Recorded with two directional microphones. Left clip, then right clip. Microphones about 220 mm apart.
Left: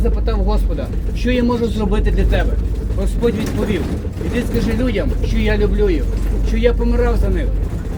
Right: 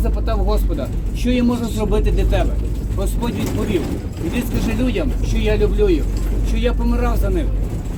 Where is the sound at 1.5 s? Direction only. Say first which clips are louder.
Left 6 dB; 50° right (ahead or behind).